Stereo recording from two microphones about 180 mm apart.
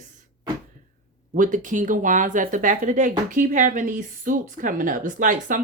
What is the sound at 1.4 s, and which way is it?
Speech, 45° right (ahead or behind).